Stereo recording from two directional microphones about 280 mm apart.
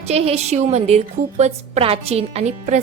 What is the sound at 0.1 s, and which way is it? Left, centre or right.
A woman's voice, right.